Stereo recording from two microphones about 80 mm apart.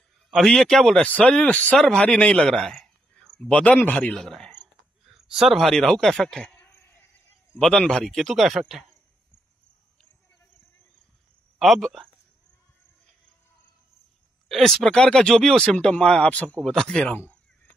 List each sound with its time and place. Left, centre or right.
0.3 s a man's voice: centre
0.9 s a man's voice: centre
4.2 s a man's voice: centre
7.5 s a man's voice: centre
11.5 s speech: centre
14.5 s speech: centre
17.1 s speech: centre